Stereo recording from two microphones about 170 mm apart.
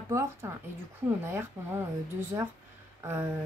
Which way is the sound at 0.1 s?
15° right (ahead or behind).